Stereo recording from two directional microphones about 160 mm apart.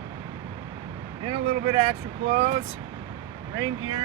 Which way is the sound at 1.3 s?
35° right (ahead or behind).